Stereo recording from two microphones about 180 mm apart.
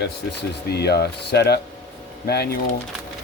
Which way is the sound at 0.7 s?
65° left (ahead or behind).